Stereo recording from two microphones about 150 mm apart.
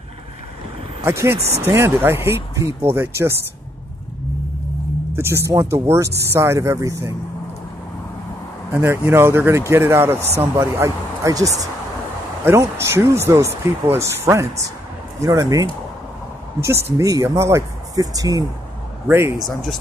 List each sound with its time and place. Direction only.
1.0 s speech: 15° right (ahead or behind)
5.1 s speech: 15° right (ahead or behind)
8.7 s speech: 15° right (ahead or behind)
16.6 s speech: 20° right (ahead or behind)